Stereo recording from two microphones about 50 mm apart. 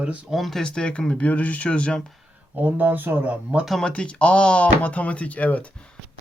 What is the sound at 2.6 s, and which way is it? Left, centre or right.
Speech, right.